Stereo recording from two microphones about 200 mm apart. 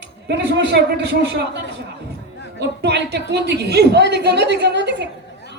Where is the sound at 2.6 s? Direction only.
55° right (ahead or behind).